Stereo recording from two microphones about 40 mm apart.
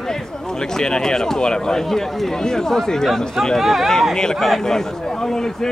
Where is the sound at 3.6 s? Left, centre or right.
Centre.